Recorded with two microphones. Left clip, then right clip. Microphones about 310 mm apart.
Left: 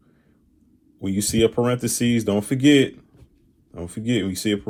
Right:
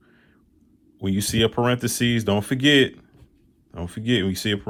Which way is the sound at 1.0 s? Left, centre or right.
Right.